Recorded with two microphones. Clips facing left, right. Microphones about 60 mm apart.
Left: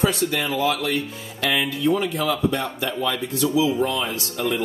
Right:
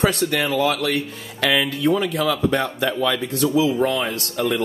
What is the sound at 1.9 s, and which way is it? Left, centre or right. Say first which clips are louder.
Speech: right 2 dB; right.